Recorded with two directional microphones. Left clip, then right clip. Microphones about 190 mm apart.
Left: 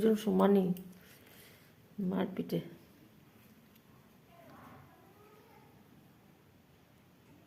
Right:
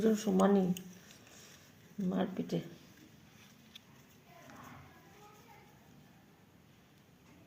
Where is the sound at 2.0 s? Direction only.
25° left (ahead or behind).